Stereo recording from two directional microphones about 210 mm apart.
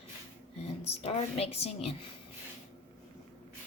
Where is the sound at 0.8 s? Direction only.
30° left (ahead or behind).